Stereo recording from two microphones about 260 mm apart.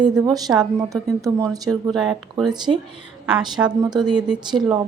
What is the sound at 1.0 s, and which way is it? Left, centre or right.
Speech, centre.